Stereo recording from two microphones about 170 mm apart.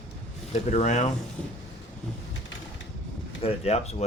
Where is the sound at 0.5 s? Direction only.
40° left (ahead or behind).